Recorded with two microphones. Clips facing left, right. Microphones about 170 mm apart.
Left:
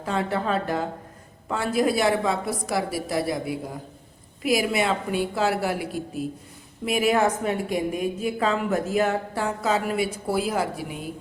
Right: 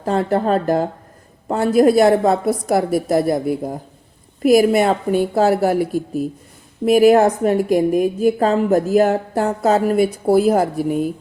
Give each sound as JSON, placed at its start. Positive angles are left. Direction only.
{"t": 0.0, "sound": "a woman's voice", "side_deg": -45}